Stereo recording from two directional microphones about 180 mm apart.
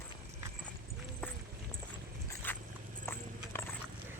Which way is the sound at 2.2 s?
10° left (ahead or behind).